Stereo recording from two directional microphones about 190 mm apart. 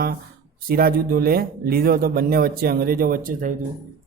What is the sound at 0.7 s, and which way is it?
A man's voice, 50° right (ahead or behind).